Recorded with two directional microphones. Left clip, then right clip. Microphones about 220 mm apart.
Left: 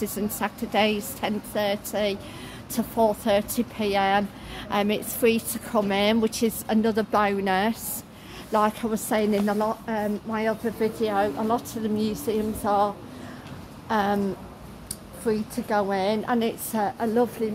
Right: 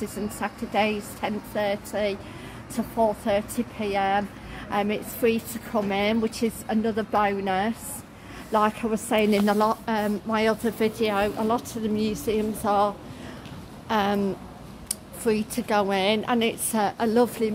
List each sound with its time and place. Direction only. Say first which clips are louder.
0.4 s a woman's voice: left 1 dB; 15° left (ahead or behind)
8.5 s a woman's voice: even; centre (ahead or behind)
9.3 s a woman's voice: right 3 dB; 20° right (ahead or behind)
11.0 s a woman's voice: even; 5° right (ahead or behind)
15.2 s a woman's voice: right 1 dB; 10° right (ahead or behind)